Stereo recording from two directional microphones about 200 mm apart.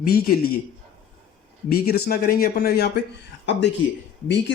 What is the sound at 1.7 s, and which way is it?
Speech, 50° left (ahead or behind).